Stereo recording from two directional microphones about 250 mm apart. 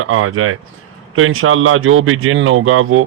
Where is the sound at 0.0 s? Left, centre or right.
Right.